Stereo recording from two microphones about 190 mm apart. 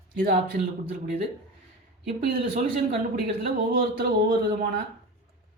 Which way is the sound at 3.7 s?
50° right (ahead or behind).